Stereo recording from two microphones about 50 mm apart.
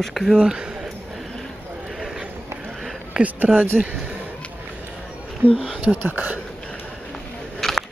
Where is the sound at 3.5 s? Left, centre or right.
Right.